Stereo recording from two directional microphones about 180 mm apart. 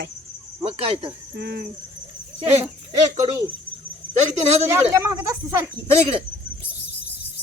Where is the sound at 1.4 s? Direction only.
60° right (ahead or behind).